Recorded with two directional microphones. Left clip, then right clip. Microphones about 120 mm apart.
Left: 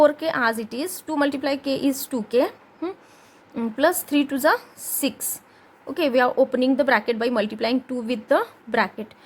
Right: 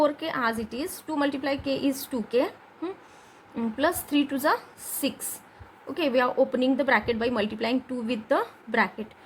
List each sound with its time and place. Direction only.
0.0 s a woman's voice: 45° left (ahead or behind)